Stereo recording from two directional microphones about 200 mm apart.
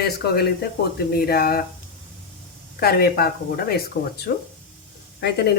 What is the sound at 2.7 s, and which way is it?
Speech, 50° left (ahead or behind).